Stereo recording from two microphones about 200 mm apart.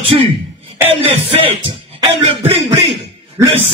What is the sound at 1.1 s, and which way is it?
Speech, 30° right (ahead or behind).